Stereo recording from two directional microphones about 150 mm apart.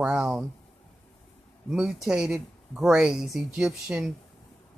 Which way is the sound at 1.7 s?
5° right (ahead or behind).